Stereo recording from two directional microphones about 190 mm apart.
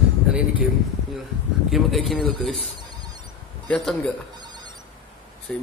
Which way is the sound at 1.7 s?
Centre (ahead or behind).